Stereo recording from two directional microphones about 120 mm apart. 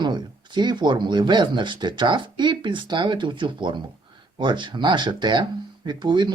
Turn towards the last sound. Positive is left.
turn(degrees=-40)  # may be behind; listen again after turning